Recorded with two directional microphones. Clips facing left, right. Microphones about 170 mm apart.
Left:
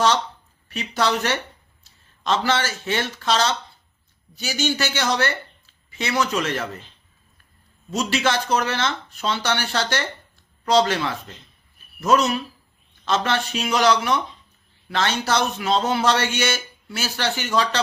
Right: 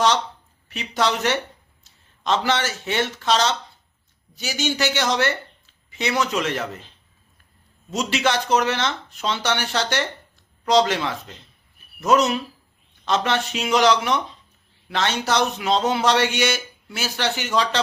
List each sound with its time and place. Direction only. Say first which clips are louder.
0.7 s a man's voice: even; 20° right (ahead or behind)
7.9 s a man's voice: even; 20° right (ahead or behind)